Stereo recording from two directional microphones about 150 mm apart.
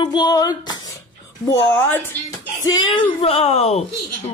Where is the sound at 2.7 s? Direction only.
30° left (ahead or behind).